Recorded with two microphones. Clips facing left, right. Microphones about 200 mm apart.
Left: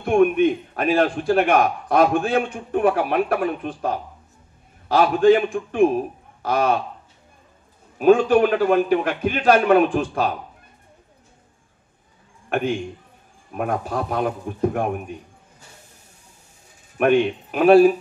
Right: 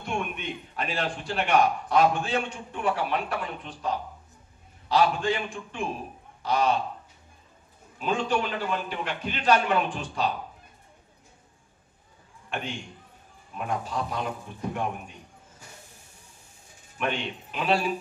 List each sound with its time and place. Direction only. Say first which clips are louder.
0.0 s a man's voice: left 16 dB; 55° left (ahead or behind)
8.0 s a man's voice: left 13 dB; 55° left (ahead or behind)
12.4 s a sound: left 12 dB; 55° left (ahead or behind)
13.5 s a man's voice: left 7 dB; 55° left (ahead or behind)
17.0 s a man's voice: left 13 dB; 55° left (ahead or behind)